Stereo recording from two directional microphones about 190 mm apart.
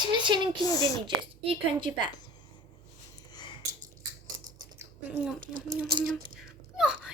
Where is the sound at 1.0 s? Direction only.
25° right (ahead or behind).